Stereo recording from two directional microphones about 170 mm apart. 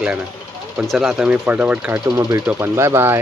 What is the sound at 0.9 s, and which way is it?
Speech, 5° right (ahead or behind).